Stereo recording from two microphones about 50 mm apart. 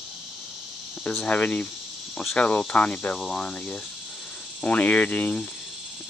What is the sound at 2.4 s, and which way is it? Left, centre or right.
Speech, left.